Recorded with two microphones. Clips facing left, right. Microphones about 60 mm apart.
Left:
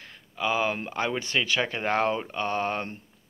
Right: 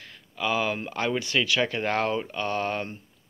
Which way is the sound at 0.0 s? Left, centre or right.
Left.